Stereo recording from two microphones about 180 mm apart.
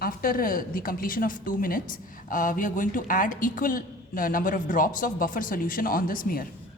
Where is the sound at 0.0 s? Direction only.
50° left (ahead or behind).